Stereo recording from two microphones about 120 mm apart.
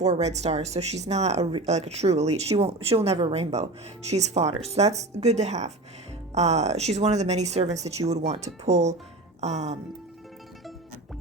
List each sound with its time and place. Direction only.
0.0 s speech: 65° right (ahead or behind)